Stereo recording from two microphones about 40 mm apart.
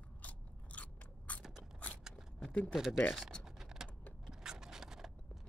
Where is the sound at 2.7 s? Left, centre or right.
Centre.